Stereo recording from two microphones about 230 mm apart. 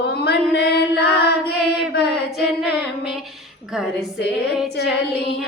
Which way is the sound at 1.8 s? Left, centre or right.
Left.